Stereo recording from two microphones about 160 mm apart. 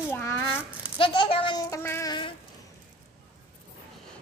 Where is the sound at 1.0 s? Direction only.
30° left (ahead or behind).